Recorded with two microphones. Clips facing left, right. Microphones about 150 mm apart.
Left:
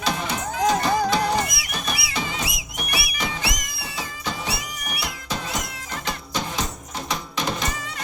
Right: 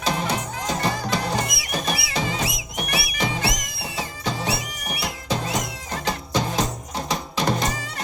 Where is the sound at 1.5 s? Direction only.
25° right (ahead or behind).